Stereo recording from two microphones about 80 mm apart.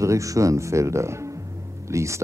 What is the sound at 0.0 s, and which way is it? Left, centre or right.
Speech, right.